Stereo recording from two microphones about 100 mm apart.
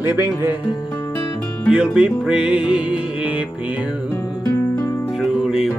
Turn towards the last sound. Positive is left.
turn(degrees=-5)  # may be behind; listen again after turning